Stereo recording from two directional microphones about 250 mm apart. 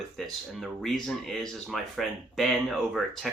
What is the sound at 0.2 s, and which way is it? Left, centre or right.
Speech, centre.